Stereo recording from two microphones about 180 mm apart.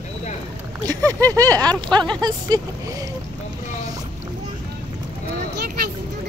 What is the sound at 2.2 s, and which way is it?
Speech, 20° right (ahead or behind).